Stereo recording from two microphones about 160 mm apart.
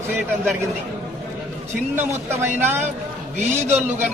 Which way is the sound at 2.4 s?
15° right (ahead or behind).